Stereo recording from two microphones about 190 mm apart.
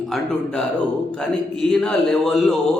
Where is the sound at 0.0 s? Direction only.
Centre (ahead or behind).